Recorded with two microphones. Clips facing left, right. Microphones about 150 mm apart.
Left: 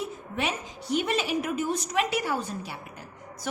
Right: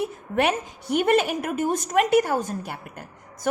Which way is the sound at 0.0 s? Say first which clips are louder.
Right 8 dB; 60° right (ahead or behind).